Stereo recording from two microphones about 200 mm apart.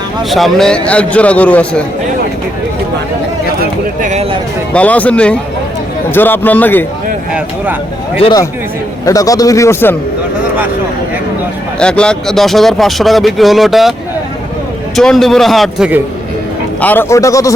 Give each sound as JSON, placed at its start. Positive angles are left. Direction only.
{"t": 0.2, "sound": "a man's voice", "side_deg": 0}
{"t": 3.6, "sound": "speech", "side_deg": -40}
{"t": 4.7, "sound": "a man's voice", "side_deg": 5}
{"t": 8.2, "sound": "a man's voice", "side_deg": 20}
{"t": 11.8, "sound": "speech", "side_deg": 5}
{"t": 14.9, "sound": "speech", "side_deg": 0}
{"t": 16.8, "sound": "a man's voice", "side_deg": 10}